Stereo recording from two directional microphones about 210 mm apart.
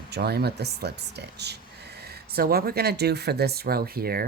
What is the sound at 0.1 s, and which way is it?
Speech, 50° right (ahead or behind).